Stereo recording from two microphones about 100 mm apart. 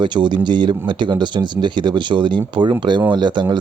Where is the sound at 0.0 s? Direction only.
50° right (ahead or behind).